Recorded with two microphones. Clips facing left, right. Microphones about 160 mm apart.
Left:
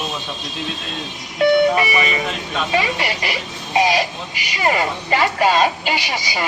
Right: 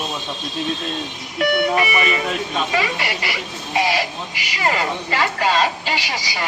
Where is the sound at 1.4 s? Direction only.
25° left (ahead or behind).